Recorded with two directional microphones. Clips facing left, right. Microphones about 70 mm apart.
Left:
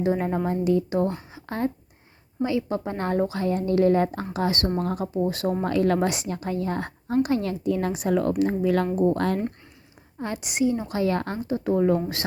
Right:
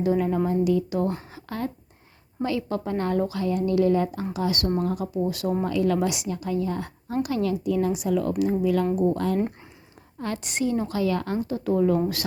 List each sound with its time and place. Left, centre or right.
0.0 s speech: left
1.3 s a sound: left
2.4 s speech: centre; by 5.5 s left
5.6 s a woman's voice: left
7.2 s a woman's voice: left
10.2 s a woman's voice: centre
10.9 s speech: left
11.4 s speech: left